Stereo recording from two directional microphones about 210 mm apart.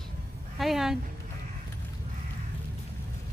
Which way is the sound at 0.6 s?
Centre (ahead or behind).